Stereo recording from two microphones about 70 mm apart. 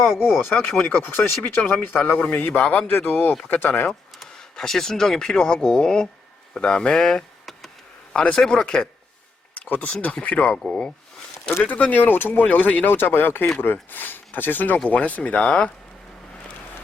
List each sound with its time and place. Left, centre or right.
0.0 s speech: left
4.2 s speech: centre
9.6 s speech: left